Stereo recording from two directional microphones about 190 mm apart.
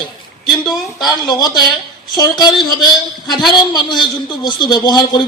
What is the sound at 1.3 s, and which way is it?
A man's voice, 20° left (ahead or behind).